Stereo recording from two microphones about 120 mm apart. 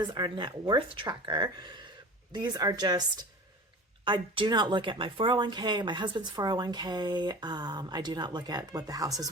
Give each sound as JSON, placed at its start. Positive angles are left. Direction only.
{"t": 0.0, "sound": "speech", "side_deg": -40}
{"t": 4.0, "sound": "speech", "side_deg": -40}